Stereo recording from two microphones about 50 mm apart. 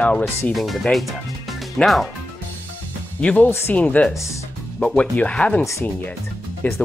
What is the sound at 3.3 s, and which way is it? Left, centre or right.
Speech, left.